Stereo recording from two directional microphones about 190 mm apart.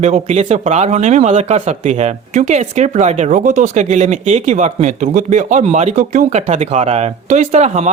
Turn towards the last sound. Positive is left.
turn(degrees=-35)  # may be behind; listen again after turning